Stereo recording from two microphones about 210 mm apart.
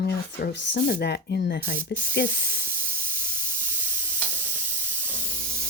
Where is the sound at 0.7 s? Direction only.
50° left (ahead or behind).